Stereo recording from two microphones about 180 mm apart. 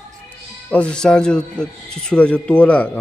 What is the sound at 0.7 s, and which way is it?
A man's voice, 5° left (ahead or behind).